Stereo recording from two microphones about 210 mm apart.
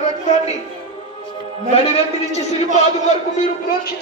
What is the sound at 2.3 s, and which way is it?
Speech, 30° left (ahead or behind).